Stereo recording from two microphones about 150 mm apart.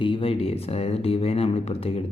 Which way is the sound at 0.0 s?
35° left (ahead or behind).